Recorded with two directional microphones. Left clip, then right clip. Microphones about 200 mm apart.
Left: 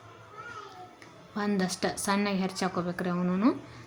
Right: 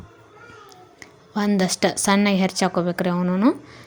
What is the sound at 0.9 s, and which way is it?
A woman's voice, 35° right (ahead or behind).